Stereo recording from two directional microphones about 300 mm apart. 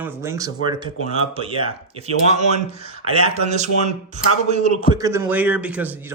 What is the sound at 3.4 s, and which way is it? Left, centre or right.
A man's voice, right.